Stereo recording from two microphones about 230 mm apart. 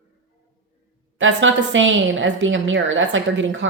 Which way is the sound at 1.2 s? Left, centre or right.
Right.